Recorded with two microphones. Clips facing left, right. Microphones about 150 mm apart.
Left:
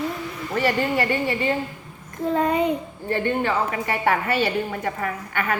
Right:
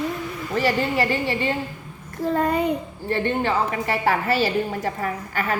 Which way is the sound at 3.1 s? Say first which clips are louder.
Even; 25° right (ahead or behind).